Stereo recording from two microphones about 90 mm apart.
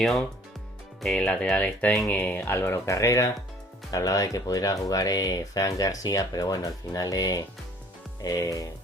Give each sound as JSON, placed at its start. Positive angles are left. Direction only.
{"t": 0.0, "sound": "speech", "side_deg": 0}
{"t": 2.7, "sound": "speech", "side_deg": 35}